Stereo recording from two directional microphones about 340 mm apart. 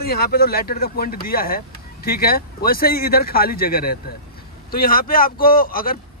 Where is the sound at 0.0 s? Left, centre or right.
Left.